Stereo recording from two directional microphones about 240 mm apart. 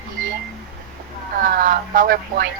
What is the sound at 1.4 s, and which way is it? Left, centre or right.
Speech, right.